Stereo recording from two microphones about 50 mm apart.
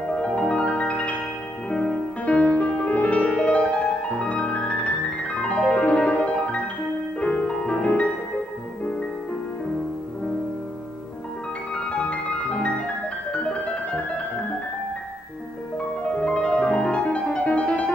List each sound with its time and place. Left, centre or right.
0.1 s music: left
2.3 s music: left
11.7 s music: left
16.0 s music: left